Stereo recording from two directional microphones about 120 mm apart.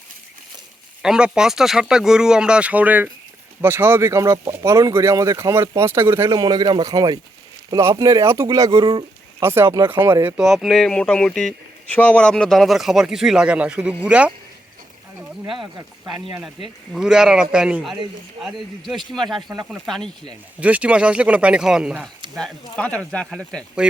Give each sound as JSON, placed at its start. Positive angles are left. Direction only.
{"t": 1.0, "sound": "speech", "side_deg": -5}
{"t": 6.4, "sound": "speech", "side_deg": -35}
{"t": 9.4, "sound": "speech", "side_deg": -20}
{"t": 10.3, "sound": "speech", "side_deg": 0}
{"t": 16.3, "sound": "speech", "side_deg": -5}
{"t": 20.6, "sound": "speech", "side_deg": -10}
{"t": 22.7, "sound": "speech", "side_deg": 10}